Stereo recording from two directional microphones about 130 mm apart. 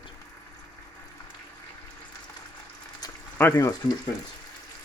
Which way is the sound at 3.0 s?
30° left (ahead or behind).